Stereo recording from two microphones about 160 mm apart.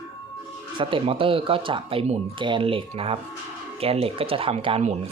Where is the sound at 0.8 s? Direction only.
35° right (ahead or behind).